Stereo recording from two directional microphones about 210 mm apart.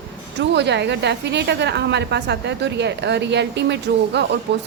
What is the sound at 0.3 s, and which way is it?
A woman's voice, 55° right (ahead or behind).